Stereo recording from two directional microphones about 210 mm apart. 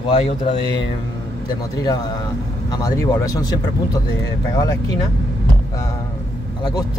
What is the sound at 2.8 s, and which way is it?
Speech, 15° left (ahead or behind).